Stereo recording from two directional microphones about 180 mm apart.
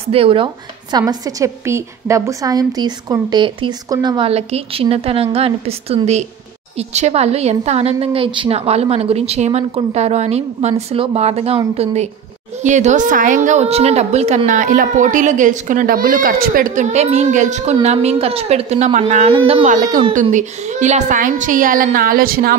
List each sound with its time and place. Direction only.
0.1 s a woman's voice: 30° right (ahead or behind)
0.9 s a woman's voice: 20° right (ahead or behind)
4.3 s a woman's voice: 35° right (ahead or behind)
19.6 s a woman's voice: 45° right (ahead or behind)